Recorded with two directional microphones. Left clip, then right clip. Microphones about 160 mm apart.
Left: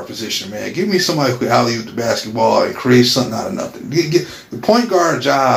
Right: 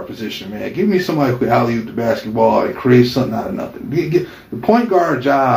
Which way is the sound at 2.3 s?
15° left (ahead or behind).